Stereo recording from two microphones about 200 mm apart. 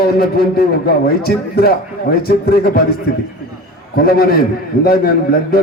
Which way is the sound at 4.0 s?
50° left (ahead or behind).